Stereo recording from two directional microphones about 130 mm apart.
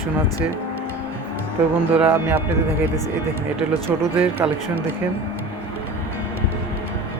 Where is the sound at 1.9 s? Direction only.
10° right (ahead or behind).